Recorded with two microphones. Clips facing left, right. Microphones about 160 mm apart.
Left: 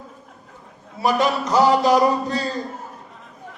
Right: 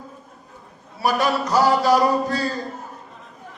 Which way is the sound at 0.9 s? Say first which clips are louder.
Left 1 dB; 20° left (ahead or behind).